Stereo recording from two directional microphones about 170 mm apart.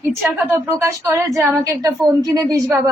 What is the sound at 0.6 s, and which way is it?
Speech, 15° right (ahead or behind).